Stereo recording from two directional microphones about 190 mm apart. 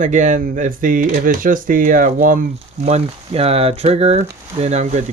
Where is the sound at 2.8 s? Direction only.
35° right (ahead or behind).